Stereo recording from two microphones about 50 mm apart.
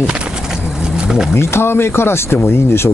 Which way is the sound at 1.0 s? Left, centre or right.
Centre.